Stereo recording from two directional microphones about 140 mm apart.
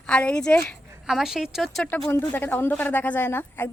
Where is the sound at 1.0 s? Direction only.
5° right (ahead or behind).